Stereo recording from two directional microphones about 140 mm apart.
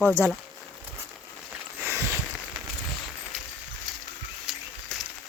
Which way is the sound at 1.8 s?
15° right (ahead or behind).